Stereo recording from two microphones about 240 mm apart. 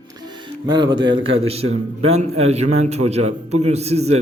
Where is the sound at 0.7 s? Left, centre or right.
Centre.